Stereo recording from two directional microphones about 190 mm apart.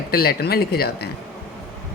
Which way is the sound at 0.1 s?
55° left (ahead or behind).